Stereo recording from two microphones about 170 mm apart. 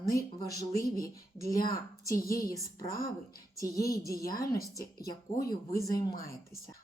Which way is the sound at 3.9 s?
20° left (ahead or behind).